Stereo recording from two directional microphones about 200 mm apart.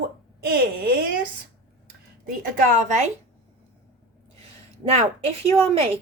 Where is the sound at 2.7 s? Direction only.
40° right (ahead or behind).